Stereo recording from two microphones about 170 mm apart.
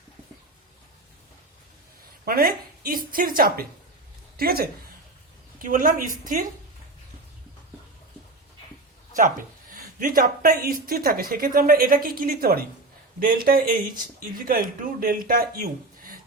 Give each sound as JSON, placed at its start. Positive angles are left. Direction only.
{"t": 2.2, "sound": "speech", "side_deg": -60}
{"t": 5.5, "sound": "a woman's voice", "side_deg": -55}
{"t": 9.1, "sound": "speech", "side_deg": -50}